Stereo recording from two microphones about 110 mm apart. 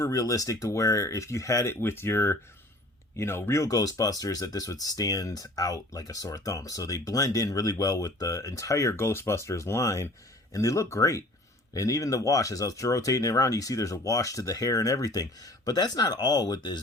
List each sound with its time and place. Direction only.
0.0 s speech: 30° left (ahead or behind)